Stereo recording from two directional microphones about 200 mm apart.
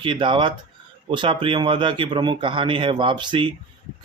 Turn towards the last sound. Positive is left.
turn(degrees=-25)  # may be behind; listen again after turning